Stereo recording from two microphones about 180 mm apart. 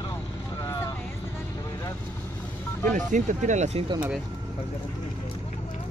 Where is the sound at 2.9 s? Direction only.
45° right (ahead or behind).